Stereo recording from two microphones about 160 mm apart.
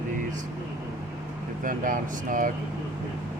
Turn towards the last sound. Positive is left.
turn(degrees=-55)  # may be behind; listen again after turning